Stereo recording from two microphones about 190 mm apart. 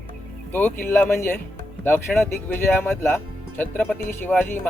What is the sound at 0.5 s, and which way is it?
Speech, 10° left (ahead or behind).